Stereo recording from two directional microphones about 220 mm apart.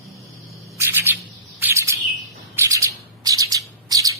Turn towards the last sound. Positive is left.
turn(degrees=-15)  # may be behind; listen again after turning